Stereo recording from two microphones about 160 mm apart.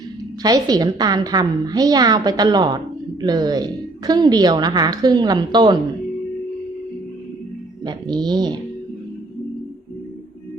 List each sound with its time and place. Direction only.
0.4 s a woman's voice: 25° right (ahead or behind)
7.9 s a woman's voice: 25° right (ahead or behind)